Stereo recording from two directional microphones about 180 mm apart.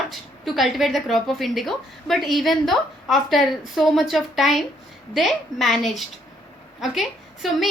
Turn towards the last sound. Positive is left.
turn(degrees=0)  # may be behind; listen again after turning